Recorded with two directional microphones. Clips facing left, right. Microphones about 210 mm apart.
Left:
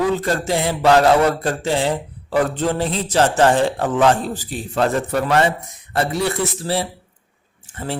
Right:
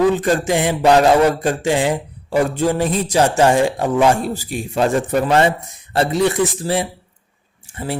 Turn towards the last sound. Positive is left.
turn(degrees=-15)  # may be behind; listen again after turning